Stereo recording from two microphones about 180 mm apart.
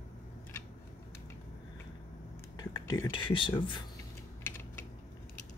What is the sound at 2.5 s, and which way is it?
Speech, 20° left (ahead or behind).